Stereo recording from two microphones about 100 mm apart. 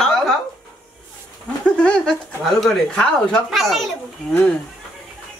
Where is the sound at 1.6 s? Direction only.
10° left (ahead or behind).